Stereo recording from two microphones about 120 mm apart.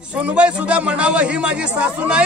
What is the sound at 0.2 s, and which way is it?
A man's voice, 10° right (ahead or behind).